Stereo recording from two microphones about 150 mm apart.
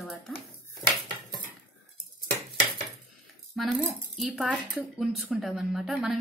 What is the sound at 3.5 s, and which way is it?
A woman's voice, 5° right (ahead or behind).